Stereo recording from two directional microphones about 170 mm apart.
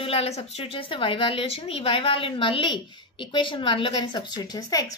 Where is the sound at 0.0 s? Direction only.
35° left (ahead or behind).